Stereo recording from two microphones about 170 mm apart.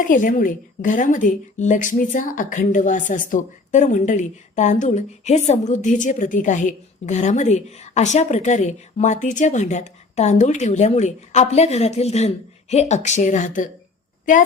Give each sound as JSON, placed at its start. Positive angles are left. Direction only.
{"t": 0.1, "sound": "a woman's voice", "side_deg": 55}